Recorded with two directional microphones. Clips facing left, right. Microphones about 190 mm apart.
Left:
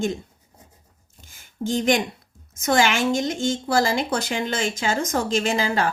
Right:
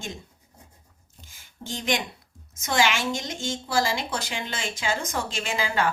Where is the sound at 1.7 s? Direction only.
50° left (ahead or behind).